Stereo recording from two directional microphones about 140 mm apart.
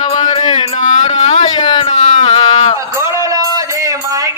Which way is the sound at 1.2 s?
40° left (ahead or behind).